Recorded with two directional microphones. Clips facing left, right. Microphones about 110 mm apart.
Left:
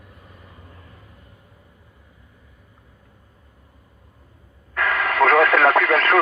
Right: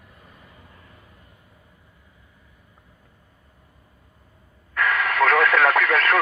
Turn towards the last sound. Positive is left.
turn(degrees=30)  # may be behind; listen again after turning